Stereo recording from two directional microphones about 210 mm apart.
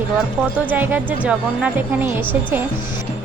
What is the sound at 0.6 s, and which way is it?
Speech, 10° right (ahead or behind).